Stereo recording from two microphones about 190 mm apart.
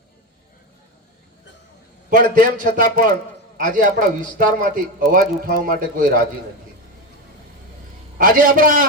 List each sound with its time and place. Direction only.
2.0 s a man's voice: 45° right (ahead or behind)
8.2 s a man's voice: 45° right (ahead or behind)